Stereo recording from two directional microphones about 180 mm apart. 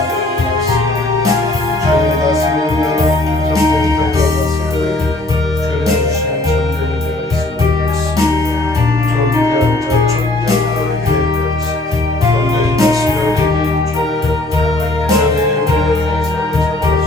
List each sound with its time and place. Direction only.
12.8 s music: 20° right (ahead or behind)